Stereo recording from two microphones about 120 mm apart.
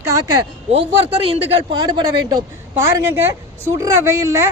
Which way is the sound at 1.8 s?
40° right (ahead or behind).